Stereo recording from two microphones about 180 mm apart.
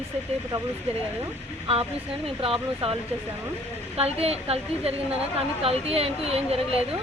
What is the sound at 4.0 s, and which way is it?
Speech, 35° right (ahead or behind).